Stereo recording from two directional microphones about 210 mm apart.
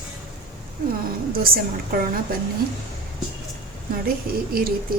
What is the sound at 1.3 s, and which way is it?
Speech, 45° right (ahead or behind).